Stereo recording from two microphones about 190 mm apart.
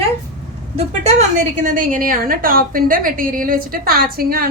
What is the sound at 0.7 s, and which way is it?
A woman's voice, 35° right (ahead or behind).